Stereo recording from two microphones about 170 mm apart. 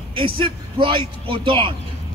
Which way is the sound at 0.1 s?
30° right (ahead or behind).